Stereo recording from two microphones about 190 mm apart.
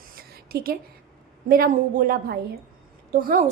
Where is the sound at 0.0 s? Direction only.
55° right (ahead or behind).